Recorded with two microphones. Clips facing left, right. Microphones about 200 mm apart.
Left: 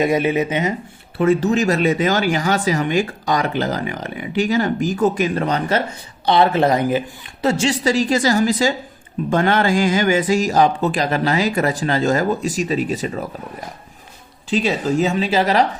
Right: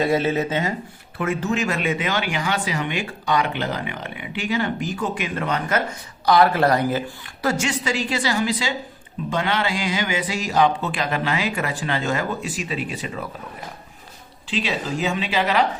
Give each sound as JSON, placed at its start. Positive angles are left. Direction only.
{"t": 0.0, "sound": "speech", "side_deg": 15}
{"t": 1.2, "sound": "speech", "side_deg": 35}
{"t": 7.4, "sound": "a woman's voice", "side_deg": 30}
{"t": 14.5, "sound": "speech", "side_deg": 45}